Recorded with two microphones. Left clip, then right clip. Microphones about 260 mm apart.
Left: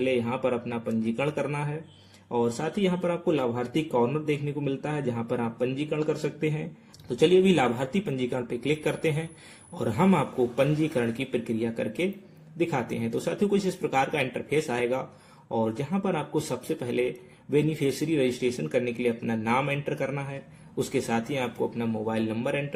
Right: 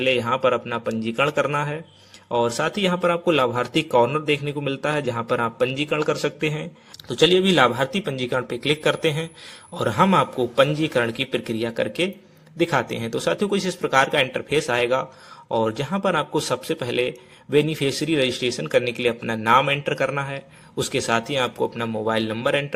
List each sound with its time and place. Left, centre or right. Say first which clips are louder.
0.0 s a man's voice: right 7 dB; centre
9.7 s a man's voice: right 7 dB; right
10.6 s a man's voice: right 9 dB; centre